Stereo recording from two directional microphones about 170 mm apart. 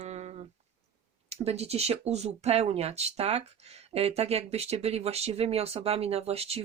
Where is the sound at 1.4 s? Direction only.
40° right (ahead or behind).